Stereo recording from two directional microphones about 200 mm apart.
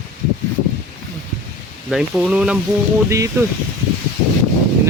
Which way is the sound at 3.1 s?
15° right (ahead or behind).